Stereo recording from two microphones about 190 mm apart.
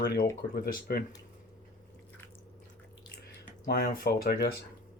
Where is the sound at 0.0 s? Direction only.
60° left (ahead or behind).